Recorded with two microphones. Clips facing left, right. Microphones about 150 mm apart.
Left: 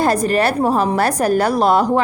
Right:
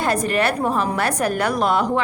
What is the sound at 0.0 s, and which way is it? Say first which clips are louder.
A woman's voice: left 4 dB; 35° left (ahead or behind).